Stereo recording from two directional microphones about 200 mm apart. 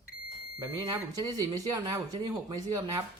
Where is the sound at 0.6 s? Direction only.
20° right (ahead or behind).